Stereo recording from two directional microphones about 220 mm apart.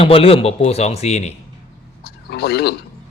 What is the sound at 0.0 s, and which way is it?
Speech, 25° left (ahead or behind).